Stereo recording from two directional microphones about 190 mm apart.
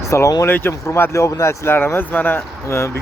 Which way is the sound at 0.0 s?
15° left (ahead or behind).